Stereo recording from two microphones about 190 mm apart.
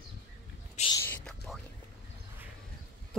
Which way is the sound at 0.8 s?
35° left (ahead or behind).